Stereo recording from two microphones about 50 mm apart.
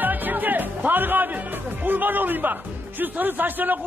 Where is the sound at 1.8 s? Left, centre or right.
Right.